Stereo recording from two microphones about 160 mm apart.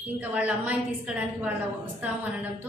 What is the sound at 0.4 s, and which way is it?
A woman's voice, 10° right (ahead or behind).